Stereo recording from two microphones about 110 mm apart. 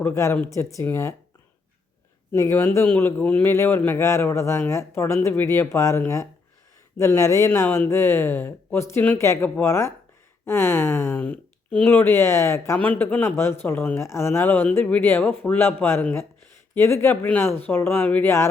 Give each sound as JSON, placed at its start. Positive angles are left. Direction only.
{"t": 0.0, "sound": "speech", "side_deg": 25}
{"t": 2.3, "sound": "speech", "side_deg": 25}
{"t": 12.8, "sound": "speech", "side_deg": 15}